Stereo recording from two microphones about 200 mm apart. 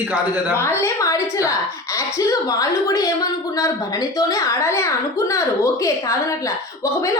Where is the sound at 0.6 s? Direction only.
15° left (ahead or behind).